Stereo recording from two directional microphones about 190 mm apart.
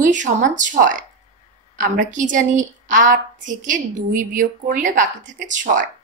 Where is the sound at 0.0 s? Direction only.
40° right (ahead or behind).